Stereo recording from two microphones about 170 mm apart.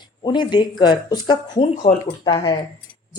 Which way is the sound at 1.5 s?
45° left (ahead or behind).